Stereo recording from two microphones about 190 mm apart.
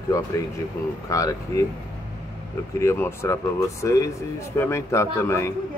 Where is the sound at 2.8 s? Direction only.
15° left (ahead or behind).